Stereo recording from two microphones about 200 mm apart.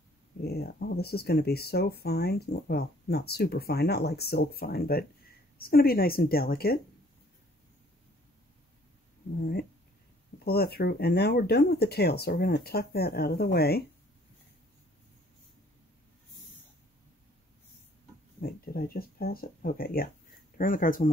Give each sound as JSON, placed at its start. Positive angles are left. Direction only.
{"t": 0.4, "sound": "speech", "side_deg": 55}
{"t": 10.4, "sound": "speech", "side_deg": 50}
{"t": 18.4, "sound": "speech", "side_deg": 50}